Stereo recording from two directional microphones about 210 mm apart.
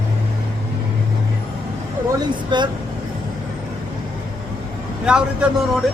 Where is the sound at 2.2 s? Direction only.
20° right (ahead or behind).